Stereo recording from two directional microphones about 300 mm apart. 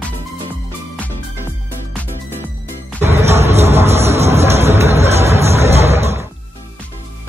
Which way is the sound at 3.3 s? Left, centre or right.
Right.